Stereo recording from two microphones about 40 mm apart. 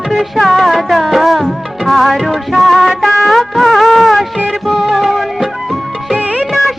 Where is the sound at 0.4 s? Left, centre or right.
Centre.